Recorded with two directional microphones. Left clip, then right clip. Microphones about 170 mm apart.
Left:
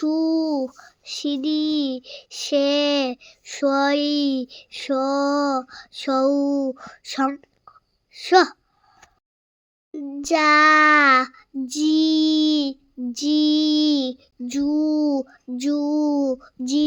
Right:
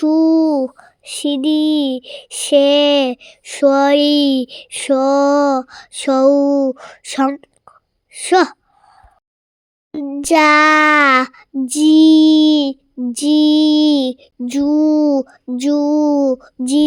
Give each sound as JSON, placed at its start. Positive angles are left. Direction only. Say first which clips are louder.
{"t": 0.0, "sound": "child singing", "louder": "right 9 dB", "side_deg": -30}
{"t": 10.1, "sound": "female singing", "louder": "right 6 dB", "side_deg": -40}
{"t": 15.5, "sound": "a sound", "louder": "right 7 dB", "side_deg": -25}